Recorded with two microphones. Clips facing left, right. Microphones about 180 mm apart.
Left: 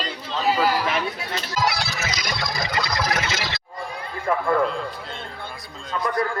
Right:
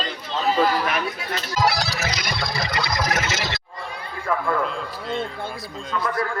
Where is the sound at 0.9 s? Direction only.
25° left (ahead or behind).